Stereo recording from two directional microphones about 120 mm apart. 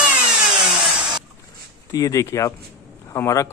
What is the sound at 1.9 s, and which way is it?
A man's voice, 30° left (ahead or behind).